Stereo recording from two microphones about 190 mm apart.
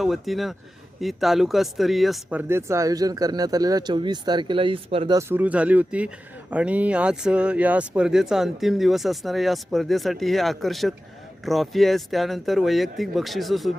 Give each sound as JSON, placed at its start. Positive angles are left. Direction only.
{"t": 0.0, "sound": "speech", "side_deg": 0}
{"t": 5.1, "sound": "speech", "side_deg": -10}